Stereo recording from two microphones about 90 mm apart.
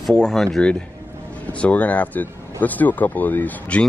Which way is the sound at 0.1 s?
5° left (ahead or behind).